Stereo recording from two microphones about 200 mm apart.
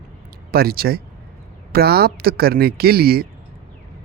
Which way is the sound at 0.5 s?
50° right (ahead or behind).